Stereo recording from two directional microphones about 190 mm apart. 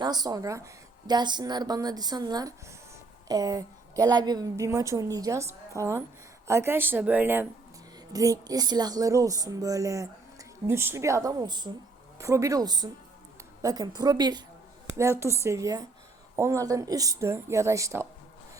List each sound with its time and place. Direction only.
0.0 s a woman's voice: 20° right (ahead or behind)